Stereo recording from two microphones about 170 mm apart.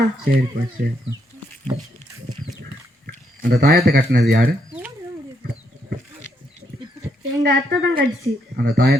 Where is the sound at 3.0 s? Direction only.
60° right (ahead or behind).